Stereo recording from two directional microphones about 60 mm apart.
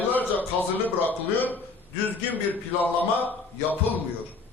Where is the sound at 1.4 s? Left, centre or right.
Left.